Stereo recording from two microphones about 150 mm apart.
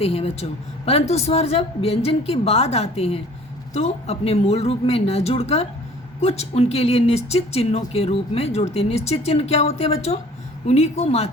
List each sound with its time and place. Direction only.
0.0 s a woman's voice: 40° left (ahead or behind)